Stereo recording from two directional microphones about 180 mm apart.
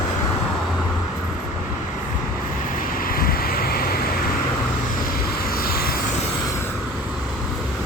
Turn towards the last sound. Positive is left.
turn(degrees=55)  # may be behind; listen again after turning